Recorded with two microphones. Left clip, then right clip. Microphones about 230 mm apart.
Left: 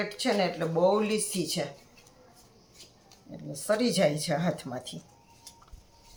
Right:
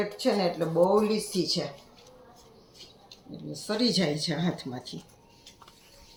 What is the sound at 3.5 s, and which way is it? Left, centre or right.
Speech, left.